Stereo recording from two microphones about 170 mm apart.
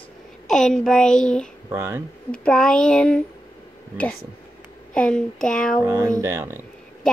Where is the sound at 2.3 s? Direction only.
5° left (ahead or behind).